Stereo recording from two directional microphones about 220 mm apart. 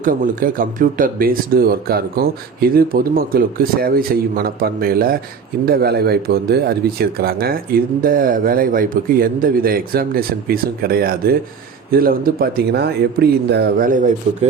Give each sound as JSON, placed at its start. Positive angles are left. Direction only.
{"t": 0.0, "sound": "speech", "side_deg": -40}